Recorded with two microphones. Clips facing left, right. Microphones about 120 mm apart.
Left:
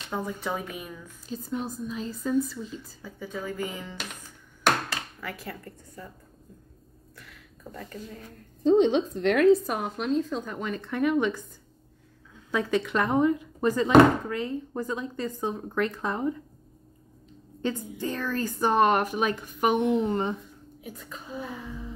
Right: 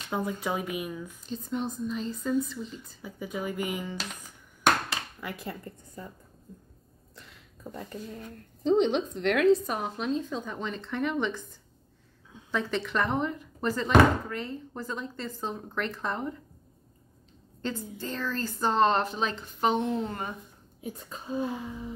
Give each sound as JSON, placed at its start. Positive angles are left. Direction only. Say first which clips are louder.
{"t": 0.1, "sound": "speech", "louder": "right 1 dB", "side_deg": -10}
{"t": 1.2, "sound": "speech", "louder": "left 1 dB", "side_deg": 5}
{"t": 3.0, "sound": "speech", "louder": "right 2 dB", "side_deg": -15}
{"t": 5.2, "sound": "a woman's voice", "louder": "even", "side_deg": -20}
{"t": 7.2, "sound": "a sound", "louder": "left 1 dB", "side_deg": -25}
{"t": 8.6, "sound": "speech", "louder": "left 4 dB", "side_deg": 0}
{"t": 12.4, "sound": "a woman's voice", "louder": "left 4 dB", "side_deg": 10}
{"t": 17.6, "sound": "speech", "louder": "left 4 dB", "side_deg": 15}
{"t": 20.8, "sound": "a woman's voice", "louder": "right 3 dB", "side_deg": -25}